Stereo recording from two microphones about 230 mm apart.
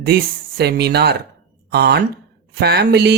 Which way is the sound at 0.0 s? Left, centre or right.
Right.